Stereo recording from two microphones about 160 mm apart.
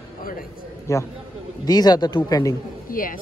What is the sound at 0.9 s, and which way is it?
Speech, 20° left (ahead or behind).